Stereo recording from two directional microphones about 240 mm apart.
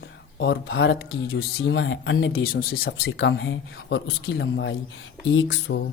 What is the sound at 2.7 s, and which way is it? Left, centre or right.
Speech, left.